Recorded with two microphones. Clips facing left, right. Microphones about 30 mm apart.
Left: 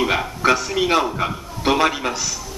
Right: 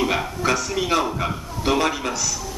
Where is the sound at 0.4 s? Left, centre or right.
Left.